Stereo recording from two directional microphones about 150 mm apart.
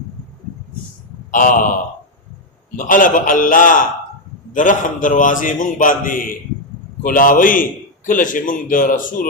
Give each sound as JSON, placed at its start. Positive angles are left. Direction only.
{"t": 1.3, "sound": "a man's voice", "side_deg": 60}
{"t": 2.7, "sound": "a man's voice", "side_deg": 60}